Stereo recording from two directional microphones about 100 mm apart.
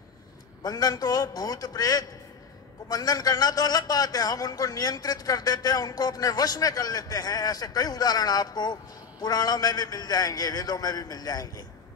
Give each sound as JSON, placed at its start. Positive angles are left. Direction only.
{"t": 0.7, "sound": "a man's voice", "side_deg": 40}